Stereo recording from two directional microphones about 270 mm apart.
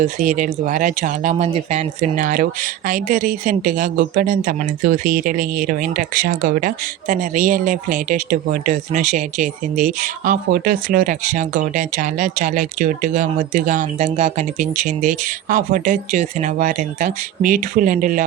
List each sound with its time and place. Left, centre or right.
0.0 s speech: right